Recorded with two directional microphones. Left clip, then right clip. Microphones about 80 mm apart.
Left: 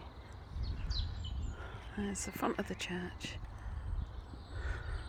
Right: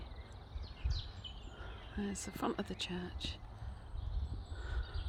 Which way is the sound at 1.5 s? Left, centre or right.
Centre.